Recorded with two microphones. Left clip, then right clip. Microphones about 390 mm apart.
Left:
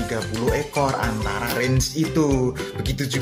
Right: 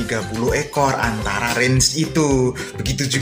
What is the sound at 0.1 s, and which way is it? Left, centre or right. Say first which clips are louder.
Speech: right 4 dB; left.